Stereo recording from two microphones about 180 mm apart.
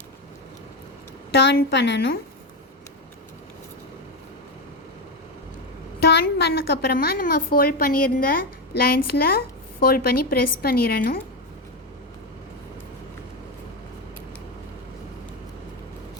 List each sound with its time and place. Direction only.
1.3 s a woman's voice: 70° left (ahead or behind)
6.0 s a woman's voice: 65° left (ahead or behind)